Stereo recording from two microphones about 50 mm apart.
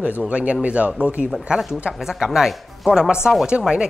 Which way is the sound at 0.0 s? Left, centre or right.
Right.